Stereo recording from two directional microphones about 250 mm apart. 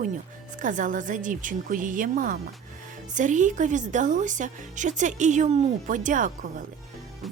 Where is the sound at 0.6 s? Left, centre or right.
Right.